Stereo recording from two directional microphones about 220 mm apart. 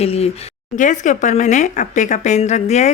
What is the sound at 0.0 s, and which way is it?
Speech, 30° left (ahead or behind).